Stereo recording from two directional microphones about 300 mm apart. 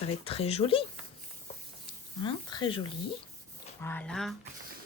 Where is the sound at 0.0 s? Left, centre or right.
Centre.